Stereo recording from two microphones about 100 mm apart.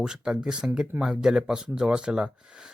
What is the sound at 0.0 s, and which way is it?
Speech, 5° right (ahead or behind).